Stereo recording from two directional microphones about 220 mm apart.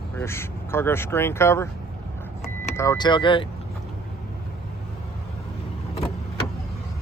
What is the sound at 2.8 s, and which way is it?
Speech, 15° left (ahead or behind).